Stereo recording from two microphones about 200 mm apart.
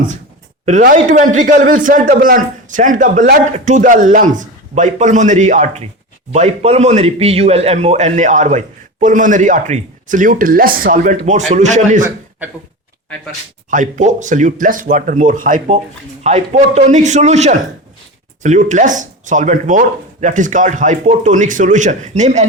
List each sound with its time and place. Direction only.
0.6 s a man's voice: 40° right (ahead or behind)
13.7 s a man's voice: 40° right (ahead or behind)